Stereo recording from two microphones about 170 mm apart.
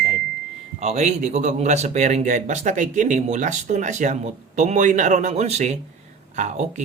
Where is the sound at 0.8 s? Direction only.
40° right (ahead or behind).